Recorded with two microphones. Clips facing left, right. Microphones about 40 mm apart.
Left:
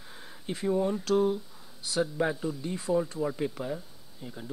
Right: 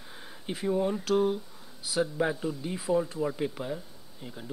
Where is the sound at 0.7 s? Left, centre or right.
Centre.